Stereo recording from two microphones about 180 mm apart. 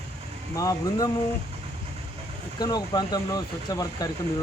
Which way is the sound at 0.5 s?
20° left (ahead or behind).